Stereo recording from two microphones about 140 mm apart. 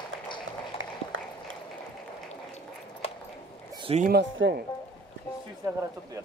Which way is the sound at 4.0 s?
90° right.